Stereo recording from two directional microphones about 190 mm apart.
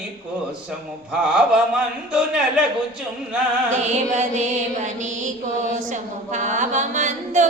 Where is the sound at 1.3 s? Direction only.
5° right (ahead or behind).